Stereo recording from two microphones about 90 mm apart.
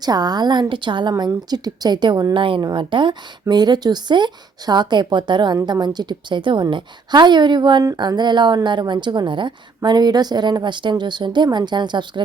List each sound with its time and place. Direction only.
0.0 s a woman's voice: 50° right (ahead or behind)
1.3 s a woman's voice: 50° right (ahead or behind)
2.3 s a woman's voice: 70° right (ahead or behind)
3.5 s a woman's voice: 50° right (ahead or behind)